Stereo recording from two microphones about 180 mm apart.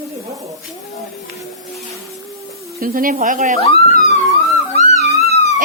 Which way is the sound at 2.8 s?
50° right (ahead or behind).